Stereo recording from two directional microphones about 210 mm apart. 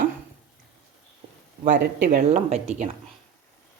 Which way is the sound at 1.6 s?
40° right (ahead or behind).